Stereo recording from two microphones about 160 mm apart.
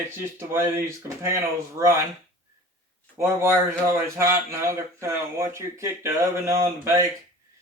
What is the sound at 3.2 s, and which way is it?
Speech, 15° right (ahead or behind).